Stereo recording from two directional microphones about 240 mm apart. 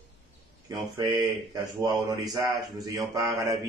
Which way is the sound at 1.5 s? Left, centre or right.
Centre.